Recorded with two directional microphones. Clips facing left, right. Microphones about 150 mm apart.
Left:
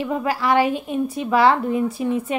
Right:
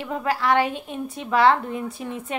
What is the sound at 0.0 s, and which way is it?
A woman's voice, 10° left (ahead or behind).